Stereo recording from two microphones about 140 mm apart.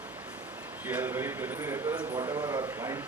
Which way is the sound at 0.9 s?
15° right (ahead or behind).